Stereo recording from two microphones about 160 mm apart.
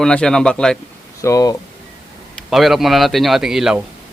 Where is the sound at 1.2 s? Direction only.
20° left (ahead or behind).